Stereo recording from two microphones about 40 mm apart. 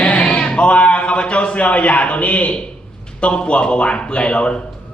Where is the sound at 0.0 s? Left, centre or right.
Left.